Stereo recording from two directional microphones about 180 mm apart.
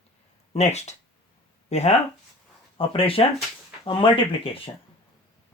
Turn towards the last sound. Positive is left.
turn(degrees=30)  # may be behind; listen again after turning